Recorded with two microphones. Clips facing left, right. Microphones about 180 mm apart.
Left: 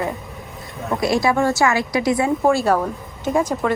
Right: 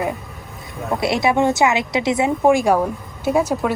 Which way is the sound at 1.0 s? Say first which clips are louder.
Even; 20° right (ahead or behind).